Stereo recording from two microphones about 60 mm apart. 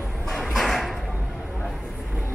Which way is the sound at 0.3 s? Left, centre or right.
Centre.